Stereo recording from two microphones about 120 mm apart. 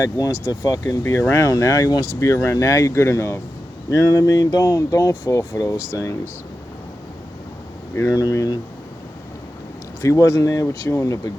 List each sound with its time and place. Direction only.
0.0 s speech: 30° left (ahead or behind)
7.9 s speech: 25° left (ahead or behind)
10.0 s speech: 25° left (ahead or behind)